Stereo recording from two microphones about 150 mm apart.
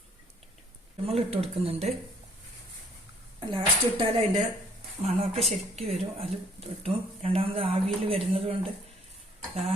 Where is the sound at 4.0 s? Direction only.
40° right (ahead or behind).